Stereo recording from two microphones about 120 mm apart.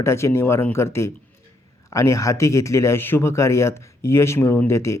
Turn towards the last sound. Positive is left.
turn(degrees=25)  # may be behind; listen again after turning